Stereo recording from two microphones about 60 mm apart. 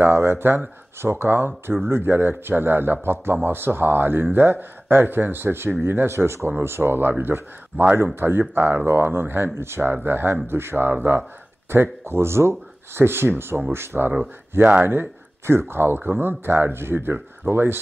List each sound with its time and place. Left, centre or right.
0.0 s speech: right
14.6 s speech: right